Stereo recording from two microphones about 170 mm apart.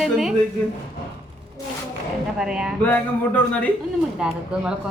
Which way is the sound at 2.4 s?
5° right (ahead or behind).